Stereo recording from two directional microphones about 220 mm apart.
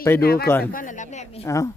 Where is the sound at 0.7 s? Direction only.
35° left (ahead or behind).